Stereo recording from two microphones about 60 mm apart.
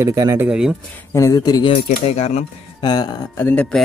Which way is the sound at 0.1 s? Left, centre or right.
Right.